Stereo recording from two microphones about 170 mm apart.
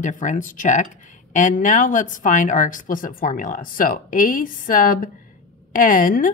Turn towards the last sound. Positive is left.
turn(degrees=55)  # may be behind; listen again after turning